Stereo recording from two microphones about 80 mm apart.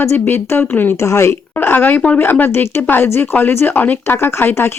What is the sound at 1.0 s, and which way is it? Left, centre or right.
Speech, left.